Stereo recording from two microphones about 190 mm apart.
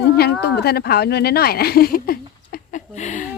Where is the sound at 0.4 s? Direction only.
55° left (ahead or behind); by 3.2 s 40° left (ahead or behind).